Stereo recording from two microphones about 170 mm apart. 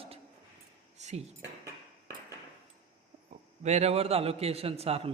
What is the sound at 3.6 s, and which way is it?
Speech, 40° right (ahead or behind).